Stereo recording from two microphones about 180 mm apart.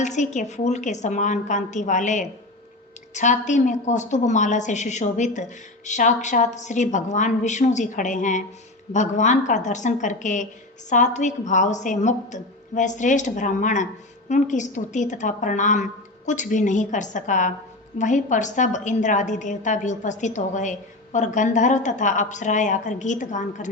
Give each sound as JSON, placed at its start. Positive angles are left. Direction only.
{"t": 0.0, "sound": "a woman's voice", "side_deg": 40}